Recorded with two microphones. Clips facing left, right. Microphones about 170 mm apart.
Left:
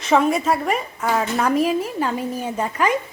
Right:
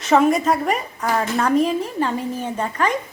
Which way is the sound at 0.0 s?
Centre (ahead or behind).